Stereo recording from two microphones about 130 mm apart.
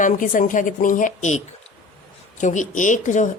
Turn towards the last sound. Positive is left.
turn(degrees=70)  # may be behind; listen again after turning